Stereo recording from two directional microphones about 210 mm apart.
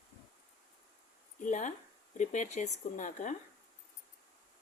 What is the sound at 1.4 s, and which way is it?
A woman's voice, 35° left (ahead or behind).